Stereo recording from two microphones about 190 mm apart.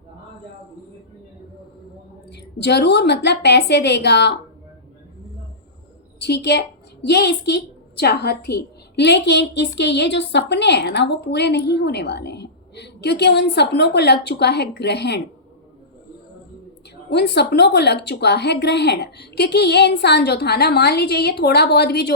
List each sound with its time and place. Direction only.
2.3 s a woman's voice: 60° left (ahead or behind)
6.1 s a woman's voice: 60° left (ahead or behind)
17.1 s a woman's voice: 60° left (ahead or behind)